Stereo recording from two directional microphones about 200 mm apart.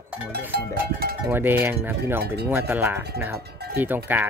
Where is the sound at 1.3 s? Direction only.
10° right (ahead or behind).